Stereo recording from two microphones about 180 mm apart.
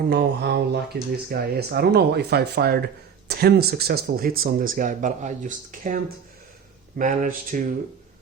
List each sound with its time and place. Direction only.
0.1 s speech: 60° right (ahead or behind); by 6.0 s 45° right (ahead or behind)
7.0 s speech: 45° right (ahead or behind)